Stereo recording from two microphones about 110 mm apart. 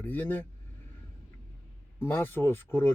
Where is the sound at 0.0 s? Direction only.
15° left (ahead or behind).